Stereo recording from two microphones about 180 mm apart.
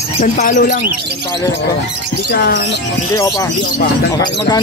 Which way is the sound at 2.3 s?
60° left (ahead or behind).